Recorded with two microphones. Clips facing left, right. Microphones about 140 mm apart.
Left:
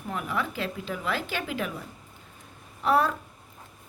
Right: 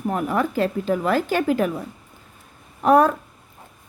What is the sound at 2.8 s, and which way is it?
Speech, 50° right (ahead or behind).